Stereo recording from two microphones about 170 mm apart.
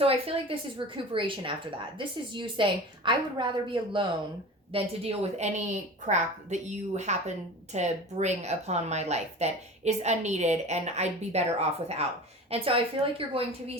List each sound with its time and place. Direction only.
0.0 s a woman's voice: 35° right (ahead or behind)